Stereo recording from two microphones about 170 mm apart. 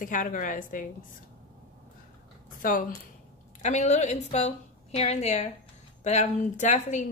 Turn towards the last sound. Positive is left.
turn(degrees=45)  # may be behind; listen again after turning